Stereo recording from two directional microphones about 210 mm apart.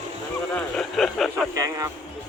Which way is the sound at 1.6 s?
15° right (ahead or behind).